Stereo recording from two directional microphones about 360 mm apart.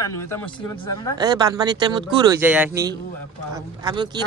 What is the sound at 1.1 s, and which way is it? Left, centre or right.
Speech, centre.